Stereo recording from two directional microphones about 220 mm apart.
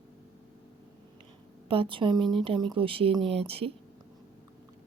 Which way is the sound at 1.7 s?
25° right (ahead or behind).